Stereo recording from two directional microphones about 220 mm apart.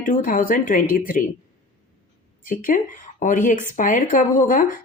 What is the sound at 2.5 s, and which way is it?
Speech, 35° left (ahead or behind).